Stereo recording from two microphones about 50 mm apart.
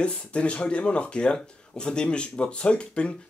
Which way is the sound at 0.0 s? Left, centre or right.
Left.